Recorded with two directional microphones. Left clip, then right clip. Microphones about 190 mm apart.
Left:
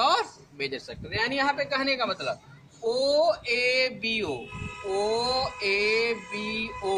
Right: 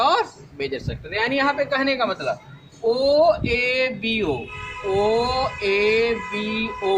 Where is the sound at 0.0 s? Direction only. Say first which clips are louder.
Right 5 dB; 25° left (ahead or behind).